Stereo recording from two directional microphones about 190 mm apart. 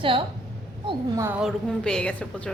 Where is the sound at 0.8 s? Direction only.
15° right (ahead or behind).